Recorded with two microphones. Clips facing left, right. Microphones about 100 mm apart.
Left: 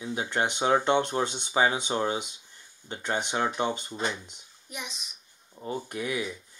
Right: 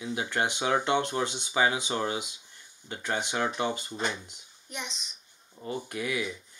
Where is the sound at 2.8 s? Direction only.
30° left (ahead or behind).